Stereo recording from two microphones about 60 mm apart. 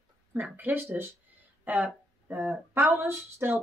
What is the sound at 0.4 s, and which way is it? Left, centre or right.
Speech, right.